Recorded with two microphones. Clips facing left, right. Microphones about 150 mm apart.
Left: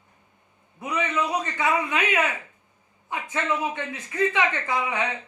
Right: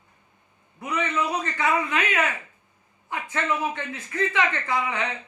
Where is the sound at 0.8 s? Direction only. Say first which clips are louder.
Even; 15° left (ahead or behind).